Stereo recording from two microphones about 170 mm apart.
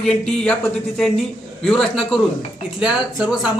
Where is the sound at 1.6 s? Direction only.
Centre (ahead or behind).